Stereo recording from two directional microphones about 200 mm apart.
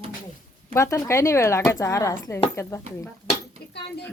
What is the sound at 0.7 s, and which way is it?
Speech, 15° left (ahead or behind).